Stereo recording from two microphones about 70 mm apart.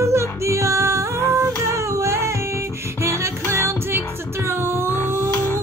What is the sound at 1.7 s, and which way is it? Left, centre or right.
Music, right.